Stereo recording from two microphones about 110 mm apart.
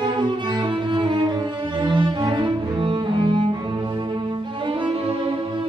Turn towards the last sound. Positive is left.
turn(degrees=-50)  # may be behind; listen again after turning